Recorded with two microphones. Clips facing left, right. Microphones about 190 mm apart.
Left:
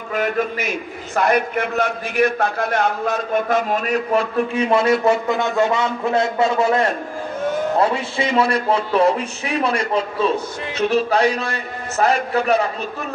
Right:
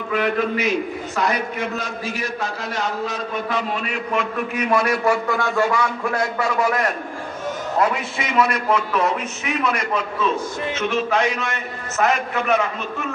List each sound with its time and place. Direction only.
0.1 s a man's voice: 45° left (ahead or behind)